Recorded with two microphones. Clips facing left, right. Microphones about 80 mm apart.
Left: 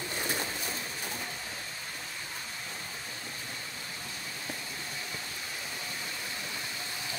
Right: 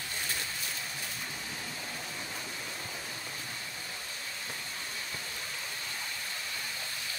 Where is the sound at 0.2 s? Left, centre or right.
Left.